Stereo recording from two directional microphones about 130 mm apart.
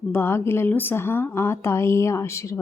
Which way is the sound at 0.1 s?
20° left (ahead or behind).